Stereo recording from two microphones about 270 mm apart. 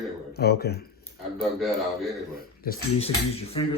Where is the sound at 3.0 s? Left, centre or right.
Left.